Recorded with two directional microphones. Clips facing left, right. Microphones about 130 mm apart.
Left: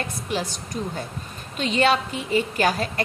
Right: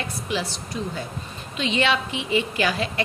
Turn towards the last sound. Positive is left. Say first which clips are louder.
# left 2 dB
turn(degrees=45)  # may be behind; listen again after turning